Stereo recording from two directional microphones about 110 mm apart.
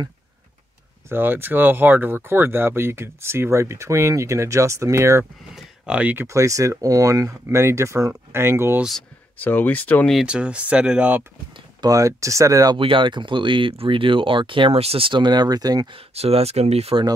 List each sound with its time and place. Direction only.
1.0 s speech: 20° right (ahead or behind)
5.9 s speech: 15° right (ahead or behind)
6.2 s speech: 30° right (ahead or behind)
9.4 s speech: 15° left (ahead or behind)
10.2 s speech: 10° right (ahead or behind)
11.8 s speech: 30° right (ahead or behind)
12.7 s speech: 50° right (ahead or behind)
15.9 s speech: 65° right (ahead or behind)